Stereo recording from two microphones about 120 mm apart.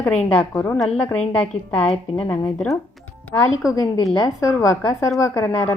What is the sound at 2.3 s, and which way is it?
Speech, 15° left (ahead or behind).